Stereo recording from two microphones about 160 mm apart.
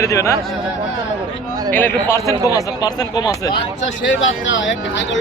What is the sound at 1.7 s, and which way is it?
Speech, 15° left (ahead or behind).